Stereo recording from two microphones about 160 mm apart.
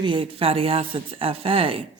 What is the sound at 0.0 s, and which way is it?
Speech, 30° right (ahead or behind).